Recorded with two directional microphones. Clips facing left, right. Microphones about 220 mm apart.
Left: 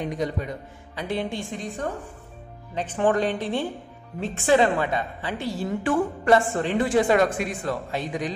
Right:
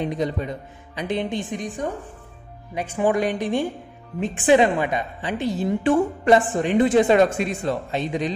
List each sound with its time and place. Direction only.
0.0 s a woman's voice: 25° right (ahead or behind)